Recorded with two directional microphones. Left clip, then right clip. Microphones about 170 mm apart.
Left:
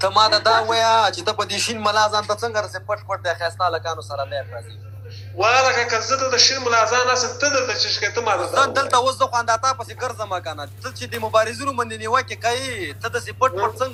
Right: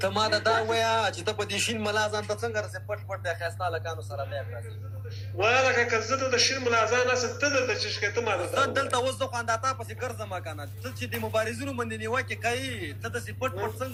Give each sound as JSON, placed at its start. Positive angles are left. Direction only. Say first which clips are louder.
{"t": 0.0, "sound": "speech", "louder": "left 9 dB", "side_deg": -20}